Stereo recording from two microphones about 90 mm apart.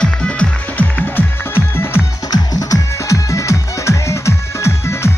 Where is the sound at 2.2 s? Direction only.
45° left (ahead or behind).